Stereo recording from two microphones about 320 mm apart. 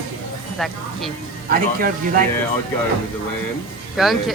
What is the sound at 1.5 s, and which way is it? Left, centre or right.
Speech, right.